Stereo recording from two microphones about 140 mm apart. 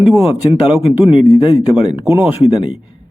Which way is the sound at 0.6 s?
10° right (ahead or behind).